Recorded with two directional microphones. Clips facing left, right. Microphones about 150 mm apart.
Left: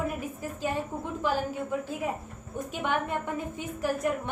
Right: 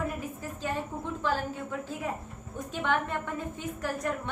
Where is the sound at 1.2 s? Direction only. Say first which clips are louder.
Left 3 dB; 10° left (ahead or behind).